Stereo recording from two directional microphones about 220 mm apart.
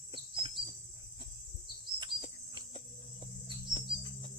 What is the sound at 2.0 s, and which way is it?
Cricket, 20° right (ahead or behind).